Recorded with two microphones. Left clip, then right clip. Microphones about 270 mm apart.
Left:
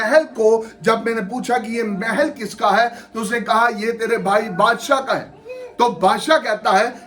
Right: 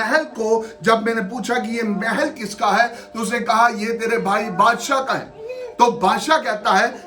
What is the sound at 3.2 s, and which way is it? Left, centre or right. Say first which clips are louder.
Speech: even; right.